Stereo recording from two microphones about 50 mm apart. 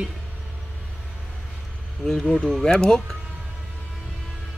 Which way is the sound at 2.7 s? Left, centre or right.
Centre.